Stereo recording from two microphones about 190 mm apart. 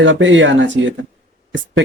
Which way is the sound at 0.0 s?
80° right.